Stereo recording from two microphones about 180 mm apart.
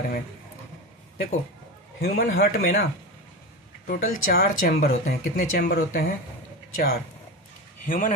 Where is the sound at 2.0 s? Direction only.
50° left (ahead or behind).